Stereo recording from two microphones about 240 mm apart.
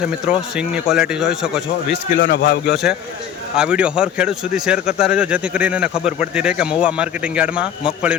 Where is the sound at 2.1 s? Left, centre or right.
Left.